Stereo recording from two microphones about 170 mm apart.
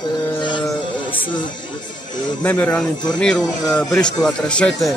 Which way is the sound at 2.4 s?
10° left (ahead or behind).